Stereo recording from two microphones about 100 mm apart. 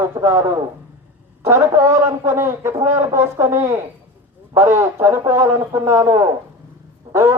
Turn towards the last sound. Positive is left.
turn(degrees=-30)  # may be behind; listen again after turning